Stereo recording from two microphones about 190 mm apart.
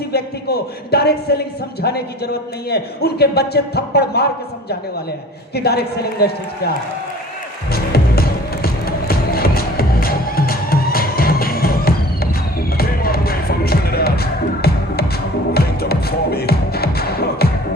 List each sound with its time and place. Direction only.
0.1 s a man's voice: 55° left (ahead or behind)
5.5 s a man's voice: 55° left (ahead or behind)
7.7 s music: 55° left (ahead or behind)